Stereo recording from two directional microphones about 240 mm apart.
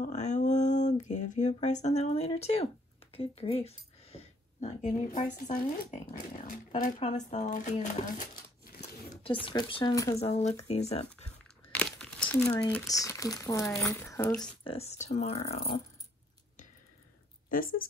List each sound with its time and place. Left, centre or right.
0.0 s a sound: left
5.4 s speech: left
9.2 s speech: left
10.1 s speech: left
11.7 s speech: centre
14.6 s speech: left
17.5 s speech: left